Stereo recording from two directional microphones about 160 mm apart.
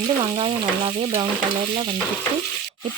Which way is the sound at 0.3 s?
30° right (ahead or behind).